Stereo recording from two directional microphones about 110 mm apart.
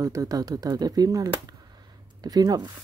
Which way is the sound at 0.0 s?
35° right (ahead or behind).